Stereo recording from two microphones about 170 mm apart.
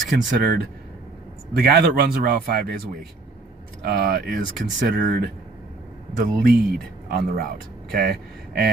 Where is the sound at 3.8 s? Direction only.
60° right (ahead or behind).